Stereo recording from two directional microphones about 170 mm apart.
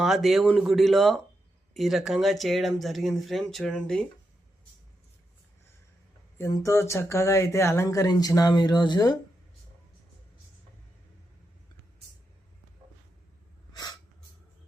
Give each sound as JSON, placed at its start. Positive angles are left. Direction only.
{"t": 0.0, "sound": "speech", "side_deg": 0}
{"t": 6.4, "sound": "speech", "side_deg": 15}